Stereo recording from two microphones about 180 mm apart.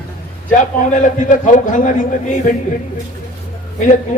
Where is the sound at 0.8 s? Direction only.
45° left (ahead or behind).